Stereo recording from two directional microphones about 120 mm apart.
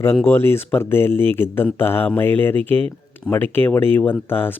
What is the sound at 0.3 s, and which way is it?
Speech, 20° left (ahead or behind).